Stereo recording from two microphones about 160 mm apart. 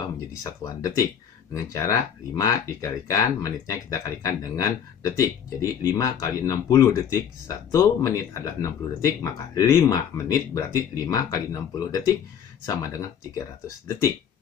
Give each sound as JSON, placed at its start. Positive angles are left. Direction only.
{"t": 0.4, "sound": "speech", "side_deg": 20}